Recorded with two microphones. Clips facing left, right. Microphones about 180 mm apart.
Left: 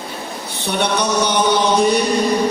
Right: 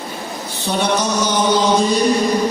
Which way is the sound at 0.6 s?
65° left (ahead or behind).